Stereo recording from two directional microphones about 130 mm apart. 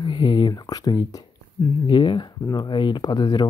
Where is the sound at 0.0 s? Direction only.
35° left (ahead or behind).